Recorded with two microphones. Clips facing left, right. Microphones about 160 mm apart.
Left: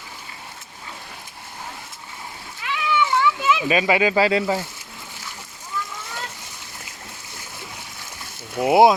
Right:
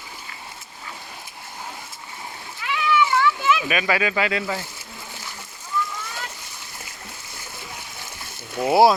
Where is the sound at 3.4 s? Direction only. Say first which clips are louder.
Left 2 dB; 20° left (ahead or behind).